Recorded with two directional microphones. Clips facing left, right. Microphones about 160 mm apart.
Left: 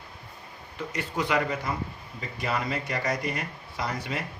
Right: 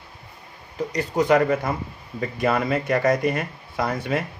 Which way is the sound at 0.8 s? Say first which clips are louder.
Right 8 dB; 40° right (ahead or behind).